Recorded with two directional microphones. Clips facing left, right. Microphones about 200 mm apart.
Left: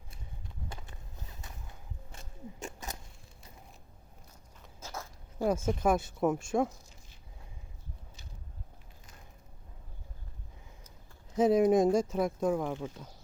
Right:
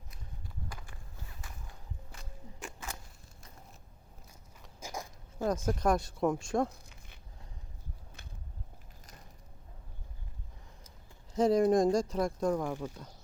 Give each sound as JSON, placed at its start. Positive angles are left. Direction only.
{"t": 0.7, "sound": "horse", "side_deg": 25}
{"t": 4.8, "sound": "zipper", "side_deg": -15}
{"t": 5.4, "sound": "speech", "side_deg": 10}
{"t": 6.8, "sound": "a sound", "side_deg": -60}
{"t": 8.2, "sound": "a sound", "side_deg": -55}
{"t": 11.3, "sound": "speech", "side_deg": 5}